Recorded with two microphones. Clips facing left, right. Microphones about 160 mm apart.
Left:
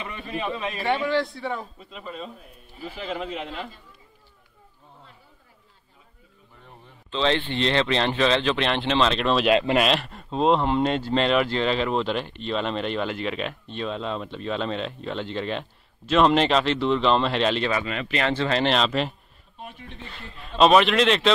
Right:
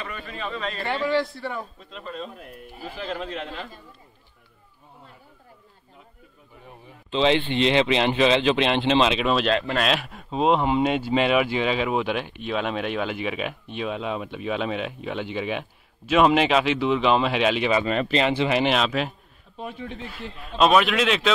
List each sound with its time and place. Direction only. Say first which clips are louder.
0.0 s a man's voice: left 3 dB; 20° left (ahead or behind)
0.7 s a man's voice: even; centre (ahead or behind)
2.3 s speech: right 6 dB; 70° right (ahead or behind)
3.0 s a man's voice: even; 5° left (ahead or behind)
7.1 s speech: right 3 dB; 10° right (ahead or behind)
9.5 s speech: left 4 dB; 20° left (ahead or behind)
9.8 s speech: left 2 dB; centre (ahead or behind)
17.8 s speech: right 6 dB; 40° right (ahead or behind)
18.1 s speech: right 1 dB; 15° right (ahead or behind)
20.3 s a man's voice: left 2 dB; centre (ahead or behind)